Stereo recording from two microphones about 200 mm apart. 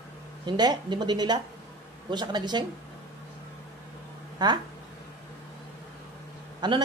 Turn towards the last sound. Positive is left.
turn(degrees=-20)  # may be behind; listen again after turning